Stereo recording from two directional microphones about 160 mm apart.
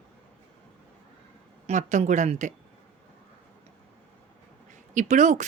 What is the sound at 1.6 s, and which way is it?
Speech, 45° right (ahead or behind).